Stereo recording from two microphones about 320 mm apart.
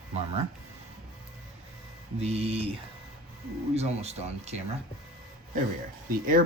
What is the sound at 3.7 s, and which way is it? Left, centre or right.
Speech, centre.